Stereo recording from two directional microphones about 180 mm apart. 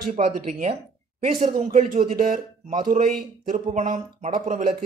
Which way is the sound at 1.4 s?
45° right (ahead or behind).